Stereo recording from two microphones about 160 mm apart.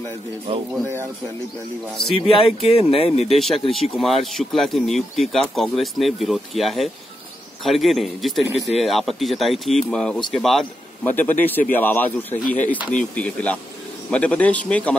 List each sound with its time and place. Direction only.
0.5 s speech: 35° right (ahead or behind)
2.1 s speech: 35° left (ahead or behind)
3.3 s speech: centre (ahead or behind)